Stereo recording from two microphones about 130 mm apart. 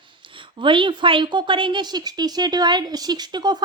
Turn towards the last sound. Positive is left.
turn(degrees=-35)  # may be behind; listen again after turning